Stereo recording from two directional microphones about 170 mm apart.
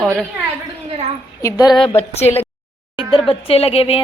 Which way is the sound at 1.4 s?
20° left (ahead or behind).